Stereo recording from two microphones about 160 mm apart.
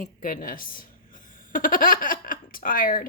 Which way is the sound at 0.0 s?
55° left (ahead or behind).